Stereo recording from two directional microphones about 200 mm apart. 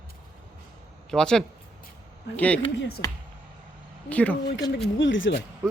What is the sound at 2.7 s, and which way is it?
Speech, 55° left (ahead or behind).